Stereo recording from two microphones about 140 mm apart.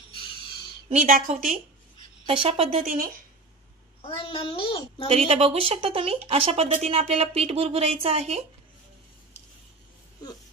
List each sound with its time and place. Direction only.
1.0 s a woman's voice: 80° right
2.2 s a woman's voice: 40° right (ahead or behind)
2.8 s speech: 90° right
4.2 s a child's voice: 35° left (ahead or behind)
5.0 s a woman's voice: 45° right (ahead or behind)